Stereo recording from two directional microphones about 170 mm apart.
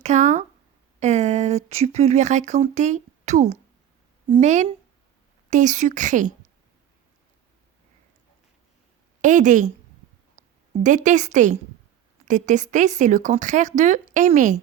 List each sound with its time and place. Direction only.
0.0 s a woman's voice: 45° right (ahead or behind)
9.2 s a woman's voice: 45° right (ahead or behind)
10.8 s a woman's voice: 45° right (ahead or behind)